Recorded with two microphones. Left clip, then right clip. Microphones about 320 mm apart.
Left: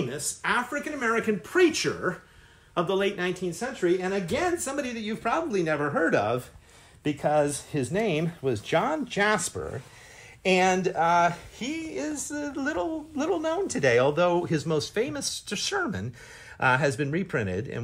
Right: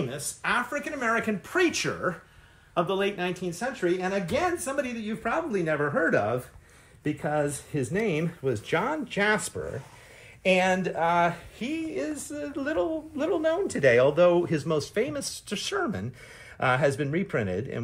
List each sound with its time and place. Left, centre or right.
0.1 s speech: centre; by 17.7 s left